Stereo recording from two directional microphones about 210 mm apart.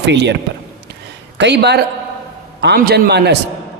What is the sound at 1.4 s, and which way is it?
A man's voice, 55° right (ahead or behind).